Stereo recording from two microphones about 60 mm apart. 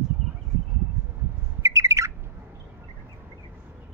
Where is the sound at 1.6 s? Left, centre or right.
Right.